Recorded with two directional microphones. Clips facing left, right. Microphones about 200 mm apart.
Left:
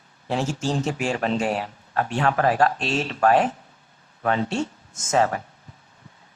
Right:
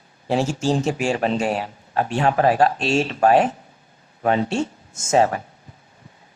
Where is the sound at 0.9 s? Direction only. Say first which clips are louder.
Right 3 dB; 15° right (ahead or behind).